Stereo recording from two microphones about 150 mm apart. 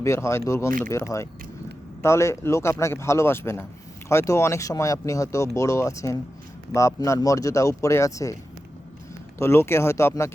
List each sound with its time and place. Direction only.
0.0 s speech: 20° left (ahead or behind)
9.4 s speech: 15° left (ahead or behind)